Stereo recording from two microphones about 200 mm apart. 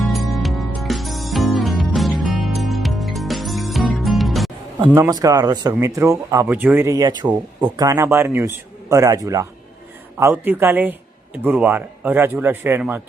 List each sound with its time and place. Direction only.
0.0 s music: centre (ahead or behind)
4.9 s speech: 15° right (ahead or behind)